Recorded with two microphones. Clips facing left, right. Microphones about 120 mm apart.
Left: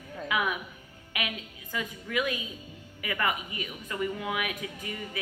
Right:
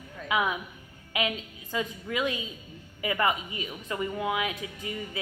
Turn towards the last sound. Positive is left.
turn(degrees=-25)  # may be behind; listen again after turning